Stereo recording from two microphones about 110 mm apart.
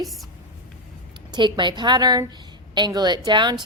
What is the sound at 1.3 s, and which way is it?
A woman's voice, 45° right (ahead or behind).